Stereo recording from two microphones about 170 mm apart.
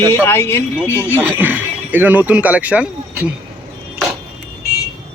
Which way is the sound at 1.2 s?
10° right (ahead or behind).